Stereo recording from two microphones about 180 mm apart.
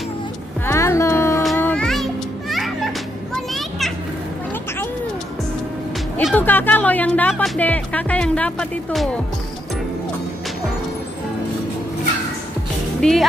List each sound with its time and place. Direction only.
0.7 s music: 15° left (ahead or behind); by 2.9 s centre (ahead or behind)
6.3 s speech: 10° left (ahead or behind)
13.0 s speech: 5° left (ahead or behind)